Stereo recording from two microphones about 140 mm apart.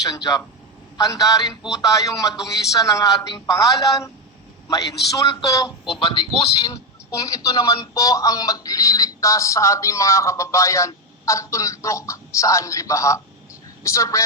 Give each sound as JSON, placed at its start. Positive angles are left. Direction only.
{"t": 0.0, "sound": "speech", "side_deg": 25}
{"t": 5.8, "sound": "speech", "side_deg": 35}
{"t": 6.6, "sound": "speech", "side_deg": 25}